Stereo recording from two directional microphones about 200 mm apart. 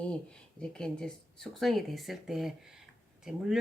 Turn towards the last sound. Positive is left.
turn(degrees=-5)  # may be behind; listen again after turning